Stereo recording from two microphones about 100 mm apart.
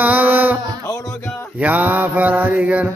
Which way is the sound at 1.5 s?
15° right (ahead or behind).